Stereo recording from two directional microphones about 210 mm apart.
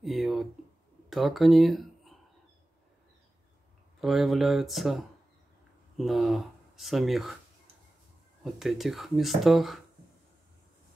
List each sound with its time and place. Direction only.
0.0 s a sound: centre (ahead or behind)
1.1 s speech: centre (ahead or behind)
4.0 s speech: centre (ahead or behind)
8.5 s speech: centre (ahead or behind)